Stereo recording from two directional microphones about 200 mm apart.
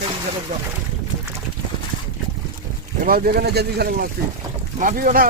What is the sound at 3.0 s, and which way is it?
Speech, 45° right (ahead or behind).